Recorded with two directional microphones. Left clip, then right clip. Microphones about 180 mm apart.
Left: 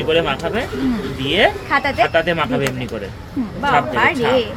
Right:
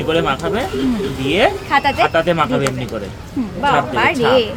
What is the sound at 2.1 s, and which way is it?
Speech, 25° right (ahead or behind).